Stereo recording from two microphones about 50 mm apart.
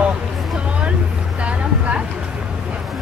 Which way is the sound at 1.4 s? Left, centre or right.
Right.